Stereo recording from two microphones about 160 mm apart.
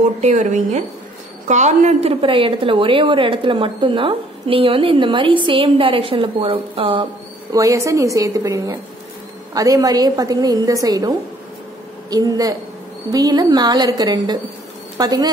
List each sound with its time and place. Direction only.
0.0 s a woman's voice: 45° right (ahead or behind)
7.5 s a woman's voice: 20° right (ahead or behind)